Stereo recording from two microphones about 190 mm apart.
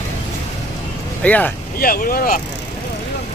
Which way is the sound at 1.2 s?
5° left (ahead or behind).